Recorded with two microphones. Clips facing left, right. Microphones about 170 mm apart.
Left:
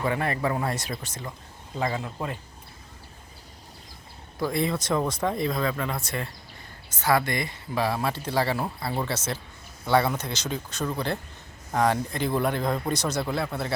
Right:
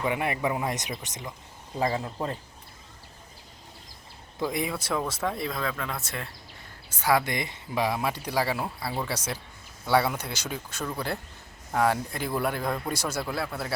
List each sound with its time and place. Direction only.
0.0 s speech: 15° right (ahead or behind)
4.4 s speech: 15° right (ahead or behind)